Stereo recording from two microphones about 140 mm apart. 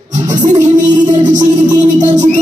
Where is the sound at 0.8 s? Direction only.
30° right (ahead or behind).